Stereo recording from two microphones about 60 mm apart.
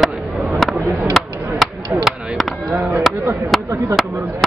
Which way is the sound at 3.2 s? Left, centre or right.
Right.